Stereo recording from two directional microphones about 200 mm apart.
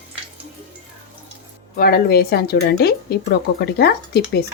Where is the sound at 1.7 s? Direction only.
50° left (ahead or behind).